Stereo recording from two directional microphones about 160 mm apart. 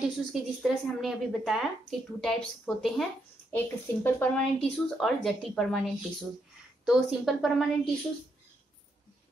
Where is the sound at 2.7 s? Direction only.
5° left (ahead or behind).